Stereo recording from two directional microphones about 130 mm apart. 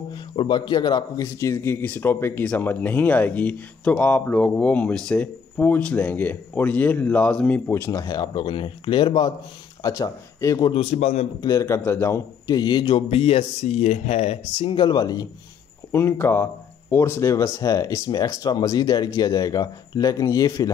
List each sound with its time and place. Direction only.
0.4 s speech: 35° left (ahead or behind)
9.8 s speech: 25° left (ahead or behind)
10.6 s speech: 45° left (ahead or behind)
11.4 s speech: 25° left (ahead or behind)
12.4 s a man's voice: 30° left (ahead or behind)
13.1 s speech: 50° left (ahead or behind); by 15.2 s 30° left (ahead or behind)
15.9 s speech: 20° left (ahead or behind)